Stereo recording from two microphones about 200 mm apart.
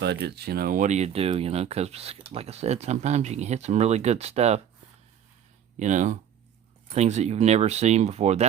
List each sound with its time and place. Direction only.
0.0 s speech: 55° right (ahead or behind); by 4.6 s 35° right (ahead or behind)
5.8 s speech: 35° right (ahead or behind)